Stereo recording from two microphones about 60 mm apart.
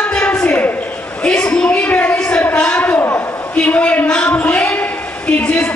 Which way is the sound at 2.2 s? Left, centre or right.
Centre.